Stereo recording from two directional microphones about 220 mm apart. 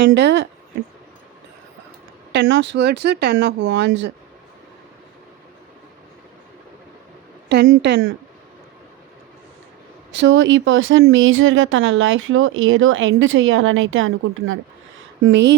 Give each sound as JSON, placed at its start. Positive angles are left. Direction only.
{"t": 0.0, "sound": "speech", "side_deg": -50}
{"t": 2.3, "sound": "speech", "side_deg": -55}
{"t": 7.4, "sound": "speech", "side_deg": -50}
{"t": 10.2, "sound": "speech", "side_deg": -55}